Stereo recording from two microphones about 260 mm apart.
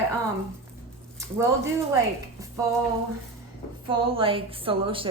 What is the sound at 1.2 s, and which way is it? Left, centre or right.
Speech, centre.